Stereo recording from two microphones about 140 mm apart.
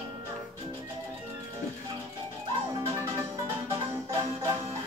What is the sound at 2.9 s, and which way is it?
Music, 20° right (ahead or behind).